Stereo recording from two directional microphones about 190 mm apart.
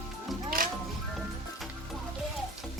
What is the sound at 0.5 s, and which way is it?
Music, 50° right (ahead or behind).